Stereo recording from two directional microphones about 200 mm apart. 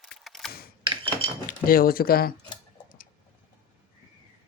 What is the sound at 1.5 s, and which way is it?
Speech, 45° left (ahead or behind).